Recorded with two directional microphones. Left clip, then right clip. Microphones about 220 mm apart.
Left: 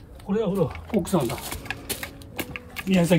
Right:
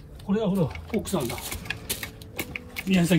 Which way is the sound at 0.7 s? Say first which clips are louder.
Left 4 dB; 25° left (ahead or behind).